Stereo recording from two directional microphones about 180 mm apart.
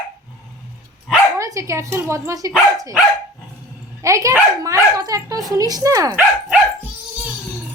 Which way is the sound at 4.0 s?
15° right (ahead or behind).